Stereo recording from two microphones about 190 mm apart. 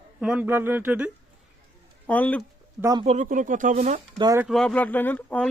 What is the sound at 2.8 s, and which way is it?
Speech, 15° right (ahead or behind).